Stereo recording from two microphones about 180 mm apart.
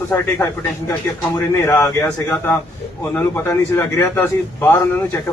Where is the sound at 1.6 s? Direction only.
15° left (ahead or behind).